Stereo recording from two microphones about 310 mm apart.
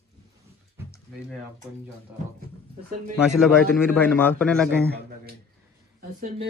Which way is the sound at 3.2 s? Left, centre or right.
Centre.